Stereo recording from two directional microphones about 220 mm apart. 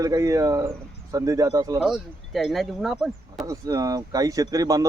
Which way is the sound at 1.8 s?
Centre (ahead or behind).